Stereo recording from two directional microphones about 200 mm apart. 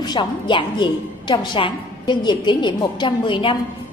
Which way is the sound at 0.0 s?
20° left (ahead or behind).